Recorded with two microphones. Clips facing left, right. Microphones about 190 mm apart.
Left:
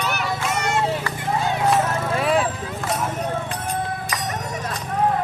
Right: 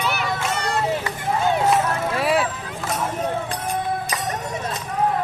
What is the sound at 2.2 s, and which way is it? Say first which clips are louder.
Vehicle: even; 5° right (ahead or behind).